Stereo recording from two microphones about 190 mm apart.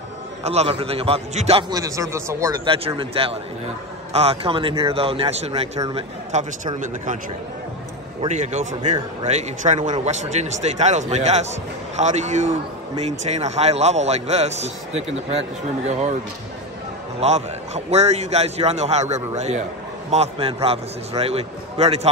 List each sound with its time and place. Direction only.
0.4 s a man's voice: 35° right (ahead or behind)
1.7 s speech: 15° right (ahead or behind)
2.6 s a man's voice: 30° right (ahead or behind)
8.3 s a man's voice: 35° right (ahead or behind)
17.2 s a man's voice: 35° right (ahead or behind)